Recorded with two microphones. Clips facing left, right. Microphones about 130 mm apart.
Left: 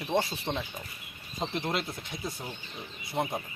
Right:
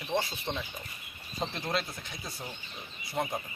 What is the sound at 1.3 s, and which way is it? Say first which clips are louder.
Speech: left 1 dB; 20° left (ahead or behind).